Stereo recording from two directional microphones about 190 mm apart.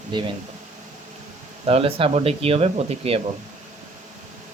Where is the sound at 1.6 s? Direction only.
30° right (ahead or behind).